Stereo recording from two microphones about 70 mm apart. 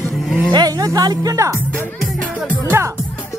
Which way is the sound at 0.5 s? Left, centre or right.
Right.